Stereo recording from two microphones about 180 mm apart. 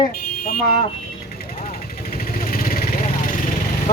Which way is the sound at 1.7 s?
50° left (ahead or behind).